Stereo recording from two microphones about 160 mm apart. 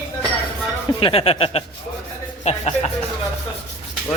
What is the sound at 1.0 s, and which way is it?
Speech, 35° left (ahead or behind).